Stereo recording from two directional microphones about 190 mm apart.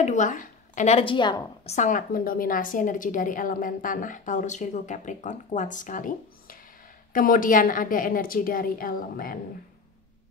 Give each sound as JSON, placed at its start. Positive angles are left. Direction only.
{"t": 0.0, "sound": "a woman's voice", "side_deg": 40}
{"t": 1.8, "sound": "a woman's voice", "side_deg": 45}